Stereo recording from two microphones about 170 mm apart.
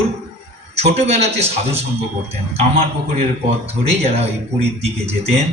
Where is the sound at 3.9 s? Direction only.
35° right (ahead or behind).